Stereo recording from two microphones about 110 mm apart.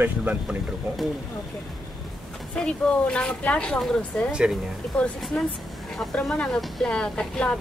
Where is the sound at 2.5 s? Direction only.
10° left (ahead or behind).